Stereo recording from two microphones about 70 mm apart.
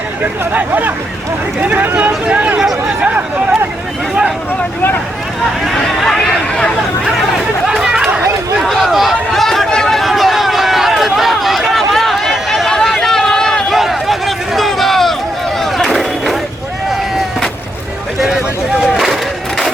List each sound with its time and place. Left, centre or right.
0.2 s speech: right
5.7 s chatter: centre
7.7 s chatter: centre
8.6 s a sound: centre
18.9 s crowd: centre